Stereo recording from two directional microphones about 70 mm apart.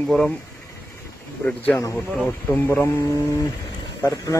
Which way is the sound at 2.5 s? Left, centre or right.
Left.